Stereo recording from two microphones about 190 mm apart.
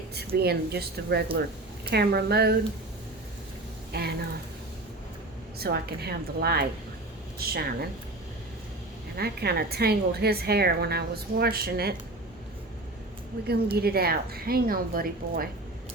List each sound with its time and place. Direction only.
0.3 s a woman's voice: 55° right (ahead or behind)
3.9 s a woman's voice: 55° right (ahead or behind)
5.5 s a woman's voice: 55° right (ahead or behind)
9.1 s a woman's voice: 55° right (ahead or behind)
13.7 s a woman's voice: 55° right (ahead or behind)